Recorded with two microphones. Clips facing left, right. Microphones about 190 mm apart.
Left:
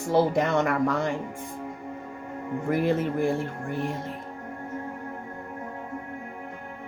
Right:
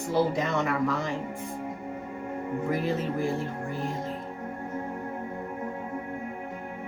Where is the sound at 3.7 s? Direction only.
65° left (ahead or behind).